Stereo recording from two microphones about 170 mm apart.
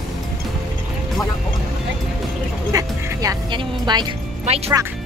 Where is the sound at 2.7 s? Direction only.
25° right (ahead or behind).